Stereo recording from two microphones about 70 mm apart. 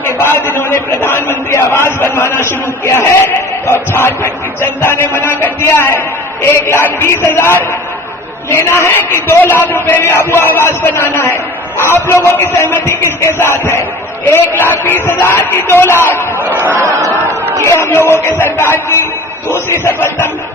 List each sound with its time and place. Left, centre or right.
0.0 s a man's voice: left
17.6 s a man's voice: left